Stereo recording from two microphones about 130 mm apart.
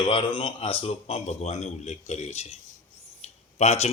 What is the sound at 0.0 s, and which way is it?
Speech, 40° left (ahead or behind).